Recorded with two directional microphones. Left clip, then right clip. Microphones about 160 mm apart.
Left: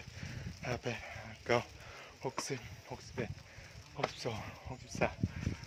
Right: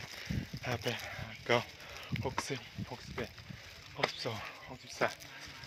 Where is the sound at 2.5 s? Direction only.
15° left (ahead or behind).